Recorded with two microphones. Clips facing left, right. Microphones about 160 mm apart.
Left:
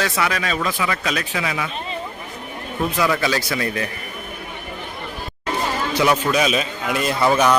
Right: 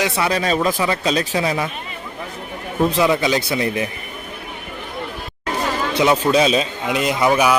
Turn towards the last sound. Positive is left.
turn(degrees=-10)  # may be behind; listen again after turning